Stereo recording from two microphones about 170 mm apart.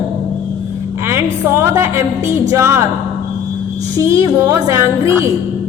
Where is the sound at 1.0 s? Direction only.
15° right (ahead or behind).